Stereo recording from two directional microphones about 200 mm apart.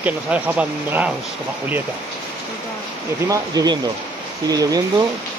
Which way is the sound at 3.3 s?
20° right (ahead or behind).